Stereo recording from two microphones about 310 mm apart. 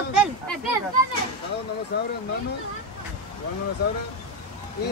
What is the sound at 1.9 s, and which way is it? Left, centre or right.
Speech, left.